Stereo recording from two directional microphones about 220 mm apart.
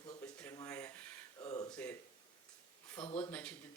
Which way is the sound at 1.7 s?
5° left (ahead or behind).